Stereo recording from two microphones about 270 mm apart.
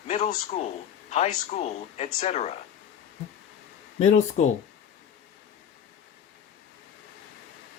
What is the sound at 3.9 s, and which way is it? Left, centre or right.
Speech, left.